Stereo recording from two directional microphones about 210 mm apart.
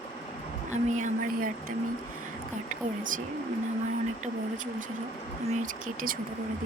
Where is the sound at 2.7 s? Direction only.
40° right (ahead or behind).